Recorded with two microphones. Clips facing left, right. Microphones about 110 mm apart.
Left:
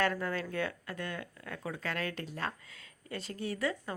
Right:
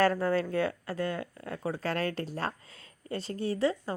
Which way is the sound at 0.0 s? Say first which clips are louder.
Right 6 dB; 35° right (ahead or behind).